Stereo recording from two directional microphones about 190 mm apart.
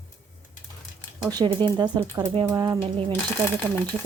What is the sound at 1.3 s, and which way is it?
Speech, 25° right (ahead or behind).